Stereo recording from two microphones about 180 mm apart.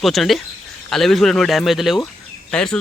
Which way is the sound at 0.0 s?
Centre (ahead or behind).